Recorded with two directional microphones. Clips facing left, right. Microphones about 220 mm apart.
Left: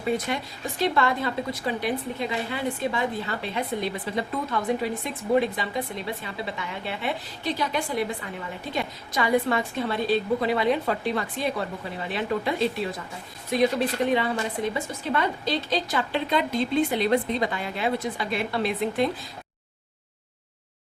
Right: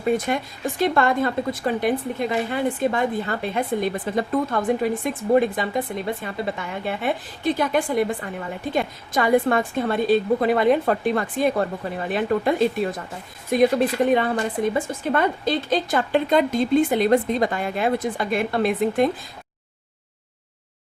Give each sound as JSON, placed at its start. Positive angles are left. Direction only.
{"t": 0.8, "sound": "a woman's voice", "side_deg": -50}